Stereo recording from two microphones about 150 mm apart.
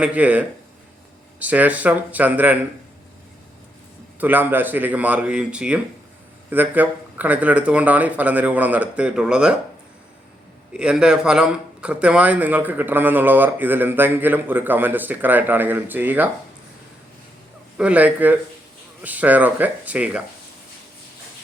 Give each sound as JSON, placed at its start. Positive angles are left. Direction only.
{"t": 0.0, "sound": "speech", "side_deg": -10}
{"t": 4.2, "sound": "speech", "side_deg": -10}
{"t": 10.8, "sound": "speech", "side_deg": -5}
{"t": 17.7, "sound": "speech", "side_deg": -10}